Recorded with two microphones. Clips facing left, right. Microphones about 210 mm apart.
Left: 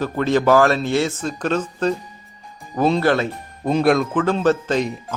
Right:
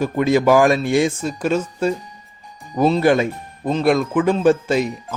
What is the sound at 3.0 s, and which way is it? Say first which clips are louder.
Speech: right 3 dB; 15° right (ahead or behind).